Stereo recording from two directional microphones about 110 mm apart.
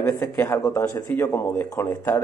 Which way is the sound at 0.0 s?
25° left (ahead or behind).